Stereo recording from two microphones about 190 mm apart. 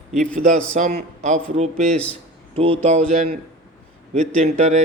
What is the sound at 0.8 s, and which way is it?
A man's voice, 40° right (ahead or behind).